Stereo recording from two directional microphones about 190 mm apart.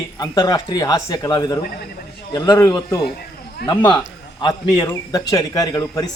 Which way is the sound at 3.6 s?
60° left (ahead or behind).